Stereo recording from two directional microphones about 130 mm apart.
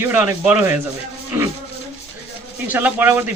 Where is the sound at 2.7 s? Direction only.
15° right (ahead or behind).